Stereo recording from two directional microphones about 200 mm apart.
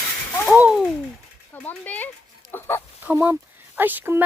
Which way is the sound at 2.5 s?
10° left (ahead or behind).